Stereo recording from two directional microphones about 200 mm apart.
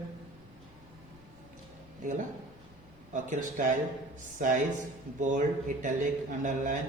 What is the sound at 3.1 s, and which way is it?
Speech, 40° right (ahead or behind).